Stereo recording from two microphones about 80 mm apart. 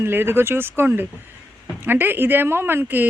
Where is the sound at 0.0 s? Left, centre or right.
Right.